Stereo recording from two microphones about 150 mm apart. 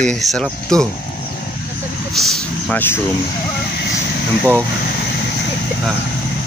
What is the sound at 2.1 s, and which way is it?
Vehicle, centre (ahead or behind).